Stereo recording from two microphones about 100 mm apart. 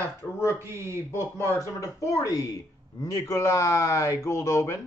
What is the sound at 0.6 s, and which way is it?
Speech, 25° right (ahead or behind).